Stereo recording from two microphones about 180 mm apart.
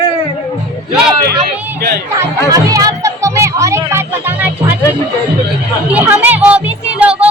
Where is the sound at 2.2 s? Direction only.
20° right (ahead or behind).